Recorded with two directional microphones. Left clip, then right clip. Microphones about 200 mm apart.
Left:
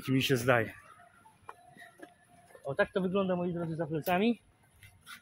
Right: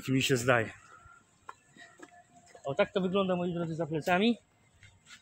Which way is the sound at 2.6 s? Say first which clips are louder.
Right 1 dB; 10° right (ahead or behind).